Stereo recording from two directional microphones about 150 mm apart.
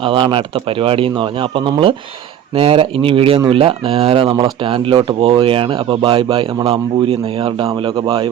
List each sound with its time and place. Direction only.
0.0 s speech: 35° right (ahead or behind)